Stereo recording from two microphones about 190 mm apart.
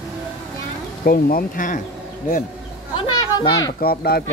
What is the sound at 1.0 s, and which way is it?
Speech, 50° left (ahead or behind).